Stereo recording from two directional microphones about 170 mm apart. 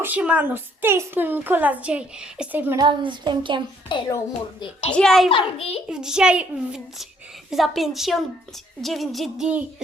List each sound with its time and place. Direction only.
0.0 s a woman's voice: 10° right (ahead or behind)
2.7 s speech: 25° right (ahead or behind)
3.9 s a child's voice: 30° left (ahead or behind)
4.9 s a child's voice: 5° left (ahead or behind)
5.3 s a child's voice: 35° left (ahead or behind)
5.9 s a child's voice: 5° right (ahead or behind)